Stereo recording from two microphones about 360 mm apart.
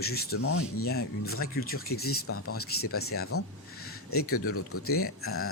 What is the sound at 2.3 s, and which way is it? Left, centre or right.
Speech, left.